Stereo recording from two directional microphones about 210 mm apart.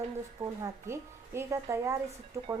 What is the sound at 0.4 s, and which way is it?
Speech, 15° right (ahead or behind).